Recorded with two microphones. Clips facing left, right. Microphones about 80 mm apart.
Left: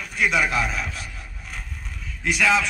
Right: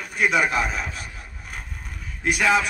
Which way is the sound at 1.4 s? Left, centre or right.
Right.